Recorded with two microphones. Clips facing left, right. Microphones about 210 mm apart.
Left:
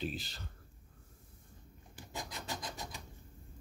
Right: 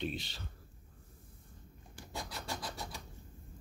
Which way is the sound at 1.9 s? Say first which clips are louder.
Right 1 dB; 20° left (ahead or behind).